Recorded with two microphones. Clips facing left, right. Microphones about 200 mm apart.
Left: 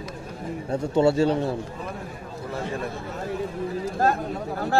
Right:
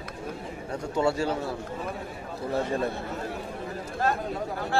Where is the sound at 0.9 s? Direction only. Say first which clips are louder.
Left 6 dB; 25° left (ahead or behind).